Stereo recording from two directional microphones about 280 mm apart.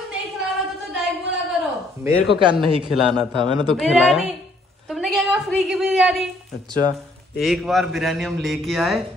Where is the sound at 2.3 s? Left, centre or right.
Centre.